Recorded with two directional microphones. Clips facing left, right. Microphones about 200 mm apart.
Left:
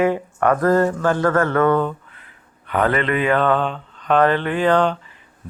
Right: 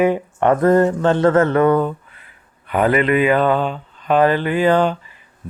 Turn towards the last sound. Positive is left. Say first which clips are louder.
# right 2 dB
turn(degrees=-5)  # may be behind; listen again after turning